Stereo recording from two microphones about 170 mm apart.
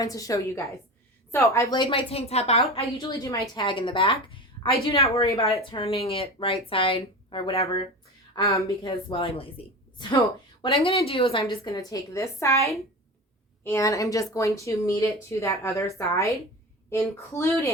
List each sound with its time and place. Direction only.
0.0 s a woman's voice: 20° left (ahead or behind); by 2.6 s 35° left (ahead or behind)
2.8 s a woman's voice: 20° left (ahead or behind)
5.3 s a woman's voice: 20° left (ahead or behind)
5.6 s a woman's voice: 30° left (ahead or behind)
8.4 s a woman's voice: 20° left (ahead or behind)
8.8 s a woman's voice: 30° left (ahead or behind)
13.7 s speech: 20° left (ahead or behind)